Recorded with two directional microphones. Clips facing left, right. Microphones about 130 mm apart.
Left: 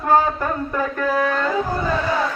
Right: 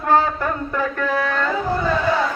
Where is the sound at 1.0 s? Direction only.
15° left (ahead or behind).